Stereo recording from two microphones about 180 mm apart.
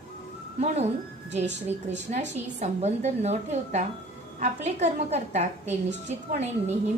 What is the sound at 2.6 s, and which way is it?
A woman's voice, 40° right (ahead or behind).